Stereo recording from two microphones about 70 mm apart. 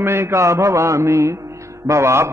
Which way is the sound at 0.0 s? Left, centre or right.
Right.